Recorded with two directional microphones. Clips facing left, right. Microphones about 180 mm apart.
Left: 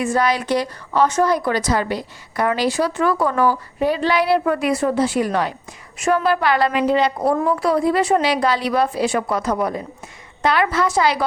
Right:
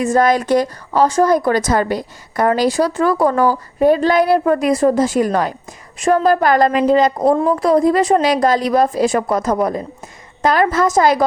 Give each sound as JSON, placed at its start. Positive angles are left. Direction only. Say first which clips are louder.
{"t": 0.0, "sound": "a woman's voice", "louder": "right 5 dB", "side_deg": -45}